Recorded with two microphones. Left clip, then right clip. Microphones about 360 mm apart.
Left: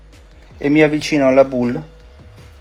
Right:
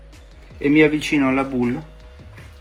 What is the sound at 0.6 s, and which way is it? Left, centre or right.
Speech, left.